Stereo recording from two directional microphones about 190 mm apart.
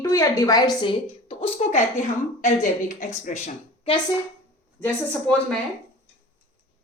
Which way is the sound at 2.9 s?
40° left (ahead or behind).